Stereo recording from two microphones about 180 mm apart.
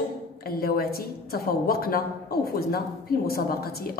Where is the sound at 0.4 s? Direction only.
55° left (ahead or behind).